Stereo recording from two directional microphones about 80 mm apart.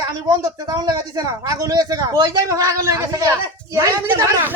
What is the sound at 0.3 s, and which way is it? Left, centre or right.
Speech, right.